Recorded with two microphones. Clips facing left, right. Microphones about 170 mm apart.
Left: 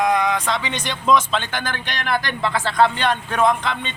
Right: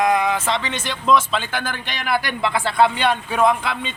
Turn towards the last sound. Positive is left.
turn(degrees=-5)  # may be behind; listen again after turning